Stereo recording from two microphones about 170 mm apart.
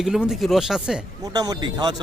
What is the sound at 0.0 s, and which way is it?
Speech, centre (ahead or behind).